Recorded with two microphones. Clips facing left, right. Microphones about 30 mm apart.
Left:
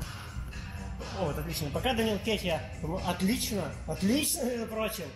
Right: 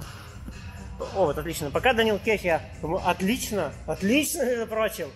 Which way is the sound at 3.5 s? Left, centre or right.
Right.